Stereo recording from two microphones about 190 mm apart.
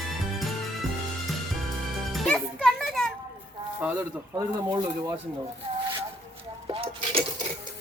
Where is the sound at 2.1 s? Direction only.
5° left (ahead or behind).